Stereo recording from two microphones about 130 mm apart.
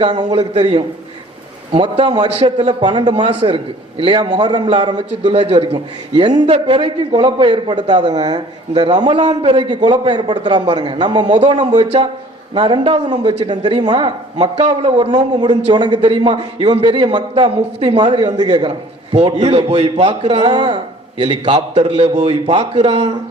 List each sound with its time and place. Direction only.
0.0 s a man's voice: 35° right (ahead or behind)
0.6 s a man's voice: 45° right (ahead or behind)
2.3 s a man's voice: 55° right (ahead or behind)
2.6 s a man's voice: 35° right (ahead or behind)
12.5 s a man's voice: 40° right (ahead or behind)
18.7 s a man's voice: 55° right (ahead or behind); by 21.5 s 35° right (ahead or behind)
21.5 s speech: 50° right (ahead or behind)